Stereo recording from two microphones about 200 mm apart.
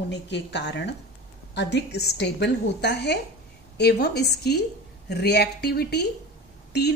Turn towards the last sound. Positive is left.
turn(degrees=55)  # may be behind; listen again after turning